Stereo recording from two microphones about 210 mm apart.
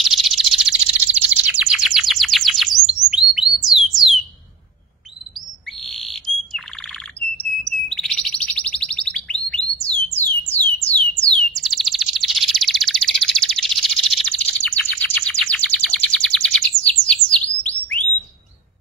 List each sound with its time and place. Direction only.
0.0 s bird: centre (ahead or behind)
5.7 s bird: centre (ahead or behind)
11.5 s bird vocalization: centre (ahead or behind)